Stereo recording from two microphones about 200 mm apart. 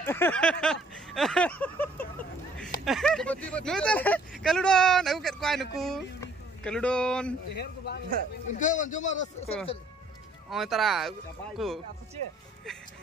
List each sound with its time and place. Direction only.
0.0 s a sound: 10° left (ahead or behind)
2.8 s speech: centre (ahead or behind)
7.5 s speech: 55° left (ahead or behind)
8.5 s a man's voice: 40° left (ahead or behind)
10.5 s speech: centre (ahead or behind)